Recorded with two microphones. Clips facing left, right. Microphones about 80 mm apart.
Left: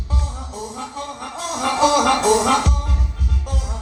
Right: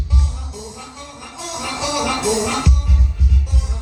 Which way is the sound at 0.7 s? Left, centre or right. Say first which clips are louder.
Left 6 dB; left.